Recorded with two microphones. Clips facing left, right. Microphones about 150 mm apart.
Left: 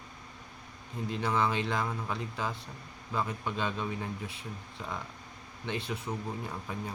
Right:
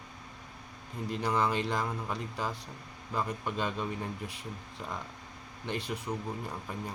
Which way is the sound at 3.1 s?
Centre (ahead or behind).